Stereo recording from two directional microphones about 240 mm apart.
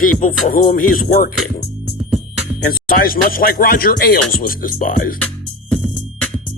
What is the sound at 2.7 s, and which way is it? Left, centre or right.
Music, left.